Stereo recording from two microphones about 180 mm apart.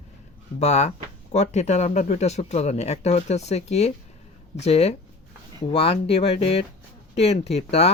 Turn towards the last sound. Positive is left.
turn(degrees=35)  # may be behind; listen again after turning